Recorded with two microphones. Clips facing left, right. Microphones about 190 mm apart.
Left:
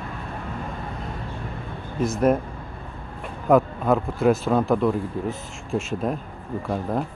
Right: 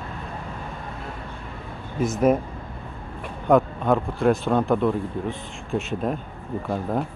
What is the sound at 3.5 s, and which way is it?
Speech, centre (ahead or behind).